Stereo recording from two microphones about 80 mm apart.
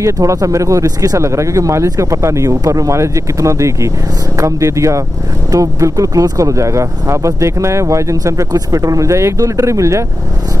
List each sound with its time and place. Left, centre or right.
0.0 s speech: right